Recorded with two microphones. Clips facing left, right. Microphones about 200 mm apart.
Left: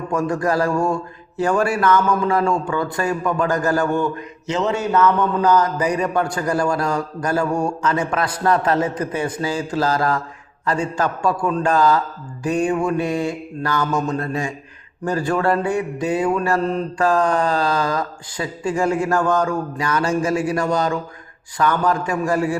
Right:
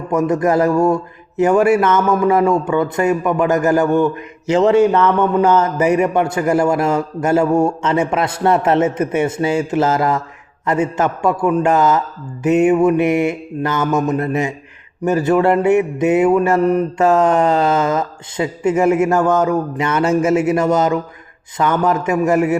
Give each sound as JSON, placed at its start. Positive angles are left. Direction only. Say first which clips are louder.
{"t": 0.1, "sound": "mantra", "louder": "right 5 dB", "side_deg": -20}
{"t": 4.5, "sound": "mantra", "louder": "right 8 dB", "side_deg": -30}